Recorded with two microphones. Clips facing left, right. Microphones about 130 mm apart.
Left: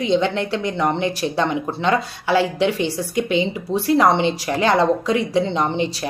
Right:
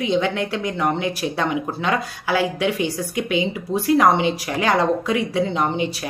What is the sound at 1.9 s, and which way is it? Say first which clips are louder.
Speech: left 4 dB; 25° left (ahead or behind).